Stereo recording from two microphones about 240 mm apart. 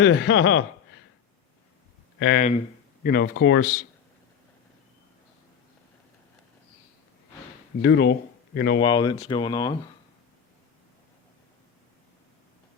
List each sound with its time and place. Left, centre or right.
0.0 s speech: left
2.1 s speech: left
2.4 s speech: left
3.1 s speech: left
7.8 s speech: left
8.8 s speech: centre